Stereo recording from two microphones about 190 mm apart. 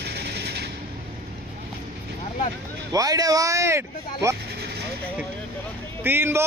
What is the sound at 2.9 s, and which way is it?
A man's voice, 20° right (ahead or behind).